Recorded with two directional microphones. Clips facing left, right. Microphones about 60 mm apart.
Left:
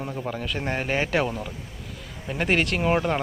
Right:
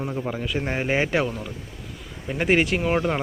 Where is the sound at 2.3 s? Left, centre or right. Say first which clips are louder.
Right 3 dB; centre.